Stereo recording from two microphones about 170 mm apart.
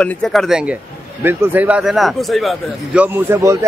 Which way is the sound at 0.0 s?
5° left (ahead or behind).